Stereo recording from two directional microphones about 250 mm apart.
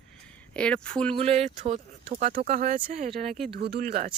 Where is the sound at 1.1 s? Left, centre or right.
Right.